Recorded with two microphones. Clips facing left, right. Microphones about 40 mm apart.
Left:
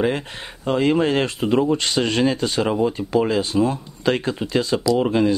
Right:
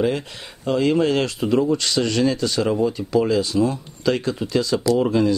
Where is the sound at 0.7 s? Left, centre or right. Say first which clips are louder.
Even; left.